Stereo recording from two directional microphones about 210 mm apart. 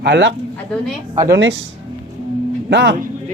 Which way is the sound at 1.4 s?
65° right (ahead or behind).